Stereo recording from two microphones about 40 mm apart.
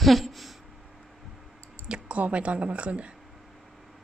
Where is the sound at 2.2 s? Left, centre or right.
Right.